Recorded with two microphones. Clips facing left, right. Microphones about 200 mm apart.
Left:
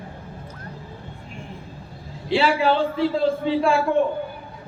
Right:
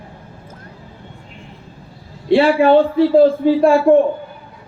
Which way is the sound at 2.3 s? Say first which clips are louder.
Right 9 dB; 50° right (ahead or behind).